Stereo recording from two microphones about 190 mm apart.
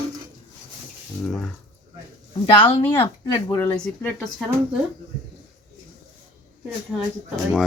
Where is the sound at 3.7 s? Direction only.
5° left (ahead or behind).